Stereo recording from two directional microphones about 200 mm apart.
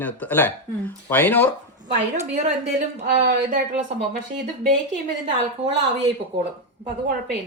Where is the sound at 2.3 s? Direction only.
35° right (ahead or behind).